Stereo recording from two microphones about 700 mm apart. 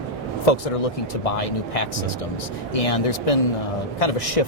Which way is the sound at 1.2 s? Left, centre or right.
Left.